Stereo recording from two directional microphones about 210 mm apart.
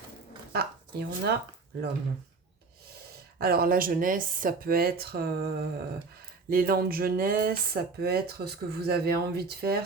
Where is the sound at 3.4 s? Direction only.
45° right (ahead or behind).